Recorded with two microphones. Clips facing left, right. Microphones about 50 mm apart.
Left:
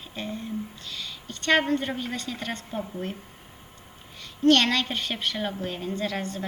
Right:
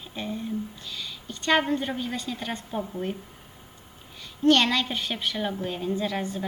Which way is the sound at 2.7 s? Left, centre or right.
Centre.